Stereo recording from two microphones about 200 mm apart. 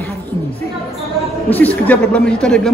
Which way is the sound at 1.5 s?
10° left (ahead or behind).